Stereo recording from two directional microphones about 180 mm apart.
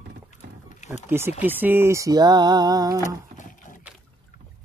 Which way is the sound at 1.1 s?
15° right (ahead or behind).